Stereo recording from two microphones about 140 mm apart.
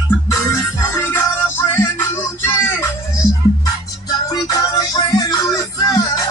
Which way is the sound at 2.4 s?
15° left (ahead or behind).